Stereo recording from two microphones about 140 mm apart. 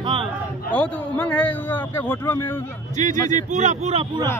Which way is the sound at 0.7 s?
10° left (ahead or behind).